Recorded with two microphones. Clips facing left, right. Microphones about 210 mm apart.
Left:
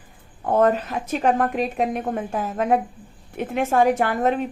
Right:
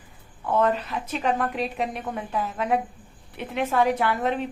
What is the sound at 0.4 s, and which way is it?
A woman's voice, 45° left (ahead or behind).